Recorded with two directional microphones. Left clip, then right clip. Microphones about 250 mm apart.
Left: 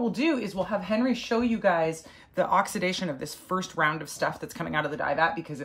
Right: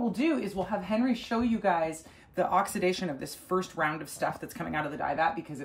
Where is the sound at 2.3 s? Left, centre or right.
Centre.